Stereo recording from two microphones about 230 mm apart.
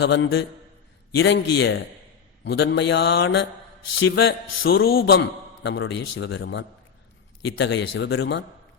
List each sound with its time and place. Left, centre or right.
0.0 s a man's voice: left